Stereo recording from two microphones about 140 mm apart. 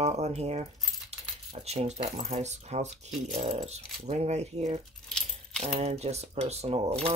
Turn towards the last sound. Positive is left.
turn(degrees=-45)  # may be behind; listen again after turning